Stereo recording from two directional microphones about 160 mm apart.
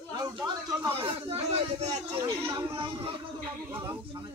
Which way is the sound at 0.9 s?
35° right (ahead or behind).